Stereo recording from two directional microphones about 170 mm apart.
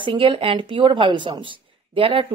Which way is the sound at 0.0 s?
30° right (ahead or behind).